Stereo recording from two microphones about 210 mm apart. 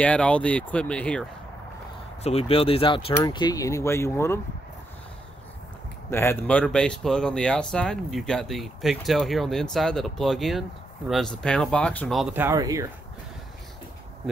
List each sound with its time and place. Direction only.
0.0 s speech: 5° left (ahead or behind)
2.2 s speech: 30° left (ahead or behind); by 4.4 s 10° left (ahead or behind)
6.0 s speech: 10° left (ahead or behind); by 12.8 s 15° right (ahead or behind)